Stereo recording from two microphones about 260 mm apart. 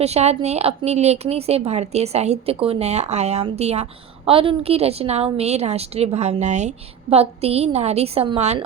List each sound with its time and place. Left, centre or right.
0.0 s a woman's voice: right